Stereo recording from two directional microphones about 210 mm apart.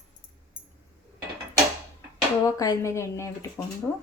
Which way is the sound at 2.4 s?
15° left (ahead or behind).